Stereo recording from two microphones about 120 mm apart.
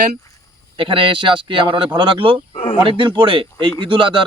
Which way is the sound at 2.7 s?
40° right (ahead or behind).